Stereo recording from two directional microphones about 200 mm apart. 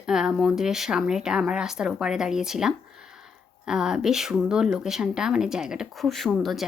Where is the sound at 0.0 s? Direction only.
5° right (ahead or behind).